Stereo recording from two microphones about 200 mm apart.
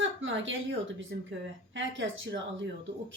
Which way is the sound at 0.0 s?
70° right (ahead or behind).